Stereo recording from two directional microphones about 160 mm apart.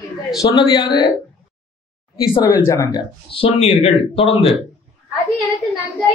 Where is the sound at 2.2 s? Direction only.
25° left (ahead or behind).